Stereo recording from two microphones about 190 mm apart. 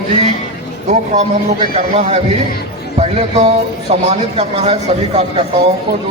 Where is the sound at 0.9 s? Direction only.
40° right (ahead or behind).